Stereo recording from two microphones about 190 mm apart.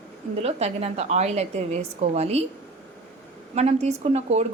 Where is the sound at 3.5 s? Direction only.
35° right (ahead or behind).